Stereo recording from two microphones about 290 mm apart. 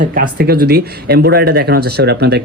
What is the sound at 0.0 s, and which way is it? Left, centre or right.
Speech, right.